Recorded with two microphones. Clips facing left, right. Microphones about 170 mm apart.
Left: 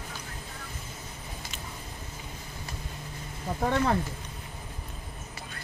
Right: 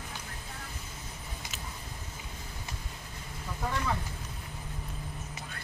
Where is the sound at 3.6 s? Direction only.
60° left (ahead or behind).